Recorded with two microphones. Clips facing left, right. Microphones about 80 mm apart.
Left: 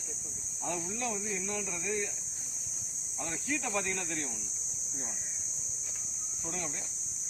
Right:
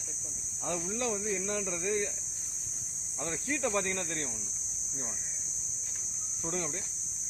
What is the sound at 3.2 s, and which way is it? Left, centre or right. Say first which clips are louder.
Speech: right 3 dB; right.